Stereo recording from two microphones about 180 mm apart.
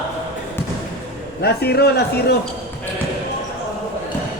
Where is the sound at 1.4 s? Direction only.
65° left (ahead or behind).